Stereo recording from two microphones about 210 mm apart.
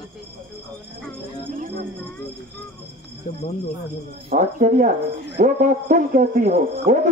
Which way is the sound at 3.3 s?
30° left (ahead or behind).